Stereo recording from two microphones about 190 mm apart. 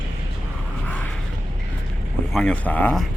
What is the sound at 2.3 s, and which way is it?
Speech, 5° left (ahead or behind).